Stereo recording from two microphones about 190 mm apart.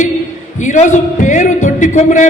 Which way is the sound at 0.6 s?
40° left (ahead or behind).